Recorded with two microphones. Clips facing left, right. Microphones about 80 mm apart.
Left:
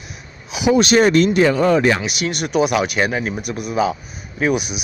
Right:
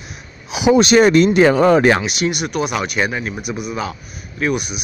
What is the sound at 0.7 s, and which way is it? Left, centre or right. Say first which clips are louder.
Speech: right 2 dB; right.